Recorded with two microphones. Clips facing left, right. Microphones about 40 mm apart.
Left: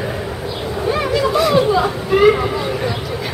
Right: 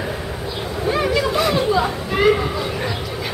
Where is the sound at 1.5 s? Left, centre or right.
Centre.